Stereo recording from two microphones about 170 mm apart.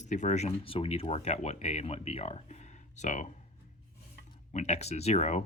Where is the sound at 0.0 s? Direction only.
45° left (ahead or behind).